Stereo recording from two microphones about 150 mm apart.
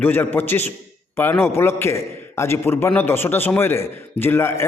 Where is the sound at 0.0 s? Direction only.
15° left (ahead or behind).